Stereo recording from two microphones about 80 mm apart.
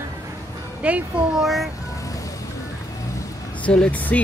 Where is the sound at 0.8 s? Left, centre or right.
Centre.